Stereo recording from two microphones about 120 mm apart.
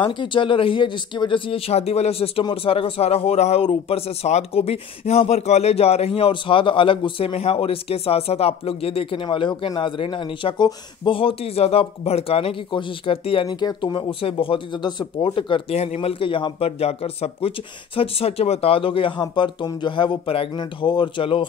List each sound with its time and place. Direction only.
0.0 s speech: 40° left (ahead or behind)
13.5 s speech: 35° left (ahead or behind)
15.7 s speech: 65° left (ahead or behind); by 21.5 s 45° left (ahead or behind)